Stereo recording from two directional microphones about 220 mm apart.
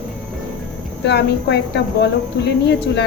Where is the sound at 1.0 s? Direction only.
50° left (ahead or behind).